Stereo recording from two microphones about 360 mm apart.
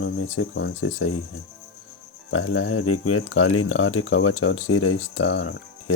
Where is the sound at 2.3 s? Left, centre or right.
Left.